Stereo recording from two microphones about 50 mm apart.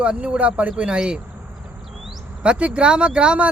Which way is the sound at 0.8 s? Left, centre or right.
Centre.